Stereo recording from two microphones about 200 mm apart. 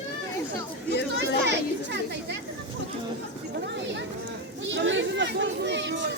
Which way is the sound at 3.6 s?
60° right (ahead or behind).